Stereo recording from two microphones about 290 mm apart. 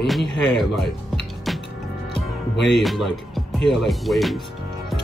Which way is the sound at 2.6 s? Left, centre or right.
Left.